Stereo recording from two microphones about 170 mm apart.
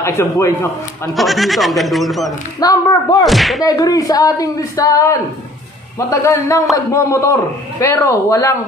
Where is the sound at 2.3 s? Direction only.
25° left (ahead or behind).